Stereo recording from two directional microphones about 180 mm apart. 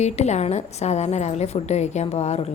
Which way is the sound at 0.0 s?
40° left (ahead or behind).